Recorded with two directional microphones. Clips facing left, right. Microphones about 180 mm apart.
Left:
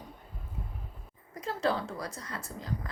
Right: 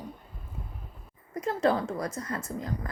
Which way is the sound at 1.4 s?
45° right (ahead or behind).